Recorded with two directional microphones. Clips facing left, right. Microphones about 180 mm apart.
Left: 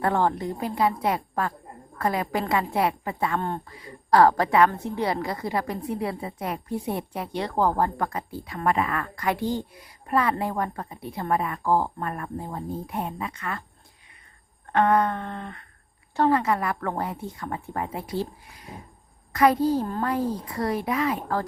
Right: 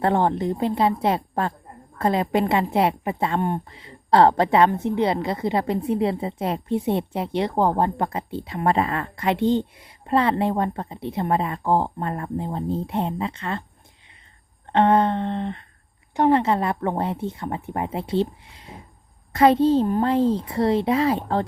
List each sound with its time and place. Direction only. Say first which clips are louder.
0.0 s a woman's voice: right 3 dB; 20° right (ahead or behind)
14.7 s a woman's voice: right 3 dB; 25° right (ahead or behind)